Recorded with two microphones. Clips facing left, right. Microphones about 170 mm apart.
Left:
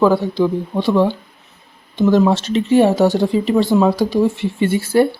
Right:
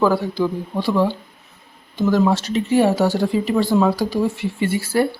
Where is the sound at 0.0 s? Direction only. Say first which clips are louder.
Left 4 dB; 20° left (ahead or behind).